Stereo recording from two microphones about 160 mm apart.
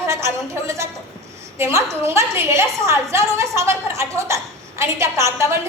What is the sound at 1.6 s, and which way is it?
A woman's voice, 15° right (ahead or behind).